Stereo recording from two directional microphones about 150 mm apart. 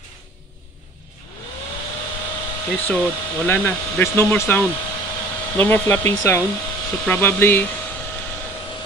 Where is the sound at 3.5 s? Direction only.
15° left (ahead or behind).